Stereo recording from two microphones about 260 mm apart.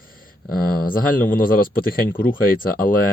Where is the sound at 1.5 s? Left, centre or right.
Left.